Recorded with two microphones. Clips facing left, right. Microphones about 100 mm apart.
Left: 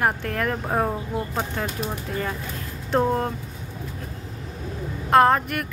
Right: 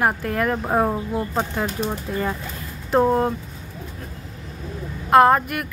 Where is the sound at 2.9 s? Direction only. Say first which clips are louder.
Right 4 dB; 15° right (ahead or behind).